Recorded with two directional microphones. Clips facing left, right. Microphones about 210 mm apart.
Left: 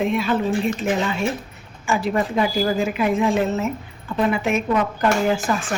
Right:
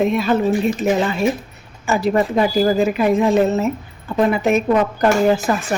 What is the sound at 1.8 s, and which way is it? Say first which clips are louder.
Speech: right 4 dB; 40° right (ahead or behind).